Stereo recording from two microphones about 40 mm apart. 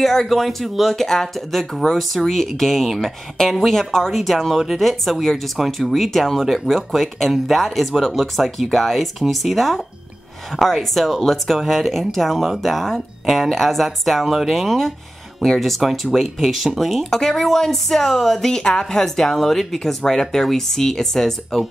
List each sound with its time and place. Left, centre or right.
0.0 s speech: centre
0.3 s speech: centre
17.1 s speech: centre